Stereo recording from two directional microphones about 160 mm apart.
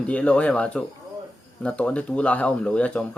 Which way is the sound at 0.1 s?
5° left (ahead or behind).